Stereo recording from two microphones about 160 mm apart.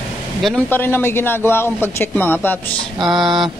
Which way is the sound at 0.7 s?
15° left (ahead or behind).